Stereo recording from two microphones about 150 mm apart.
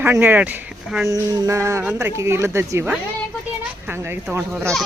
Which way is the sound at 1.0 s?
20° right (ahead or behind).